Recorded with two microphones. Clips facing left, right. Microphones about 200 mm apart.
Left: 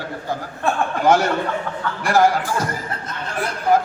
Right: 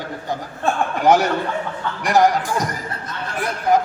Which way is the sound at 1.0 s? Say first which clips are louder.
Right 1 dB; 15° right (ahead or behind).